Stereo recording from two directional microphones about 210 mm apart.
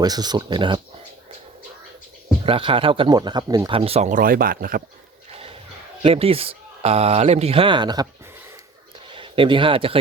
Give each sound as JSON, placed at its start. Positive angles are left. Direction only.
{"t": 0.0, "sound": "speech", "side_deg": -20}
{"t": 2.4, "sound": "speech", "side_deg": -25}
{"t": 6.0, "sound": "speech", "side_deg": -25}
{"t": 9.1, "sound": "speech", "side_deg": -25}